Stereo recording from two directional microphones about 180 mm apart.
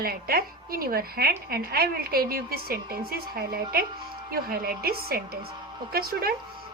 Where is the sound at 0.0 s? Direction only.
55° right (ahead or behind).